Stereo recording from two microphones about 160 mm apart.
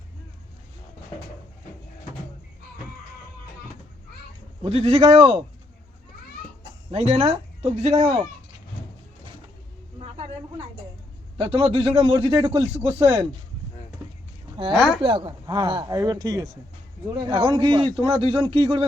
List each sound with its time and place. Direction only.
4.6 s speech: 40° right (ahead or behind)
6.9 s speech: 45° right (ahead or behind)
10.0 s a sound: 40° right (ahead or behind)
11.3 s speech: 40° right (ahead or behind)
12.9 s speech: 20° right (ahead or behind)
14.7 s speech: centre (ahead or behind)
15.0 s speech: 30° right (ahead or behind)